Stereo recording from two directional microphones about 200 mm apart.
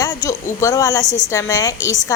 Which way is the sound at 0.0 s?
15° left (ahead or behind).